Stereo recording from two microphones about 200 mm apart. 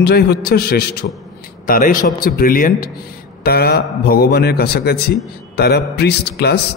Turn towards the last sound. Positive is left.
turn(degrees=55)  # may be behind; listen again after turning